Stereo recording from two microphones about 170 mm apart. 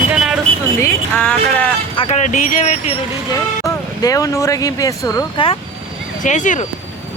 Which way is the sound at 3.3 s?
20° left (ahead or behind).